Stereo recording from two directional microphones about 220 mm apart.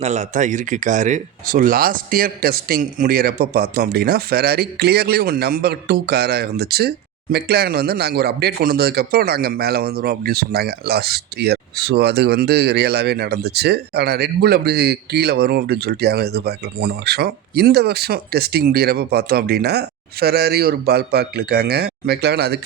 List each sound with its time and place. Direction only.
0.0 s speech: 30° right (ahead or behind); by 22.6 s 50° right (ahead or behind)